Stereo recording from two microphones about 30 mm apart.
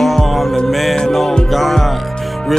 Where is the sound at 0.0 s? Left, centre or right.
Centre.